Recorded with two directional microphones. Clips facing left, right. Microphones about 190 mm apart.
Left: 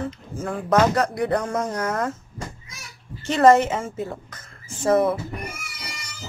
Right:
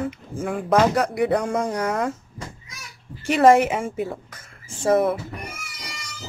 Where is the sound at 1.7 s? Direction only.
15° right (ahead or behind).